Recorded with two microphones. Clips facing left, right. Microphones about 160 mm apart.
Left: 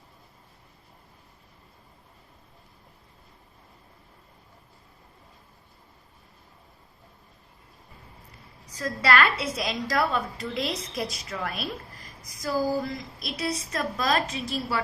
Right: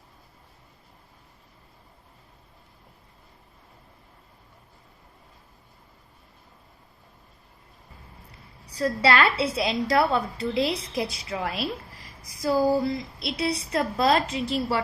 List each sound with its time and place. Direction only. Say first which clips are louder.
8.6 s a woman's voice: right 4 dB; 30° right (ahead or behind)